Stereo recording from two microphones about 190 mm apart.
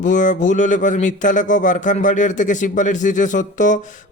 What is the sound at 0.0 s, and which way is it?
Speech, 40° left (ahead or behind).